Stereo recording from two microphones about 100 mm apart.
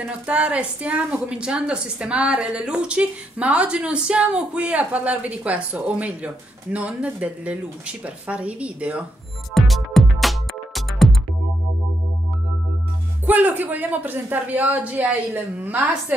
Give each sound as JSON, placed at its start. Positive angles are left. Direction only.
{"t": 0.0, "sound": "a woman's voice", "side_deg": -10}
{"t": 9.5, "sound": "music", "side_deg": 0}
{"t": 13.3, "sound": "a woman's voice", "side_deg": -15}